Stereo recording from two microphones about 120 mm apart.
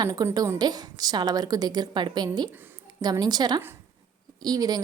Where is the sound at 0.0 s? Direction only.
30° right (ahead or behind).